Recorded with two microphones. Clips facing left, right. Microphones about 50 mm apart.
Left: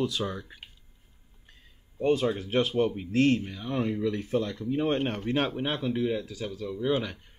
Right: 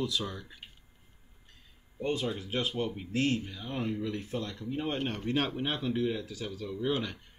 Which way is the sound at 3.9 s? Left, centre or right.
Left.